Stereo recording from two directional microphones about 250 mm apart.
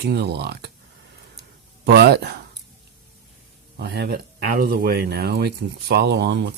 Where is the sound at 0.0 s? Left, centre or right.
Right.